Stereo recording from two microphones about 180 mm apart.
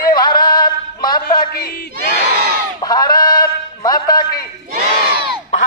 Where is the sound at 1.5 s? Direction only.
55° left (ahead or behind).